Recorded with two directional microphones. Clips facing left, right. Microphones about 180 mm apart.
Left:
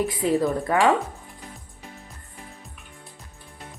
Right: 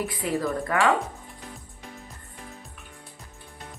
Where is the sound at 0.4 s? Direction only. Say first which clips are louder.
Left 3 dB; 20° left (ahead or behind).